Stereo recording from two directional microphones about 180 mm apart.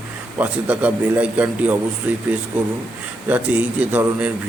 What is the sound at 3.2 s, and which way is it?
Speech, 10° right (ahead or behind).